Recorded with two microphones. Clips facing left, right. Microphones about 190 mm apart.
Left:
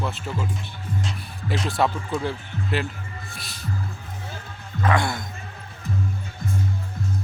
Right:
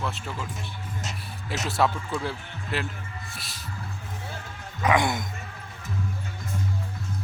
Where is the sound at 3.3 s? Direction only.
Centre (ahead or behind).